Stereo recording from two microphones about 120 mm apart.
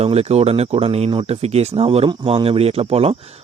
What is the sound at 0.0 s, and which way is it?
Speech, 60° right (ahead or behind).